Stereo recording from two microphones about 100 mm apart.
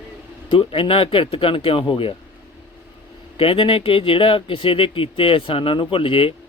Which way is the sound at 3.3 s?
65° left (ahead or behind).